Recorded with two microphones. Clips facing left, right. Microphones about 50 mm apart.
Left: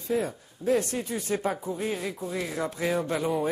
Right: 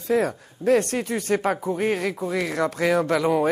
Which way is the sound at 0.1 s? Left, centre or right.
Right.